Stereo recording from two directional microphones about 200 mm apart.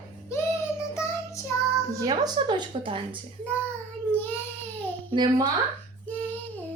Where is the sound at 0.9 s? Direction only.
15° left (ahead or behind).